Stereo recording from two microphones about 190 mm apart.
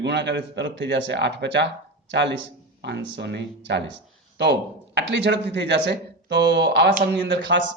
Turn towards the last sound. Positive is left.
turn(degrees=-70)  # may be behind; listen again after turning